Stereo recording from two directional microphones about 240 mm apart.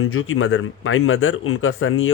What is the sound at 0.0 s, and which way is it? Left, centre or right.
Speech, left.